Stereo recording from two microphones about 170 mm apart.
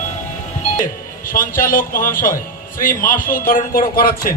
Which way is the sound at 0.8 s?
55° left (ahead or behind).